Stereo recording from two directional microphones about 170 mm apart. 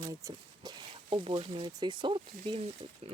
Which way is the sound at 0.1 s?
20° right (ahead or behind).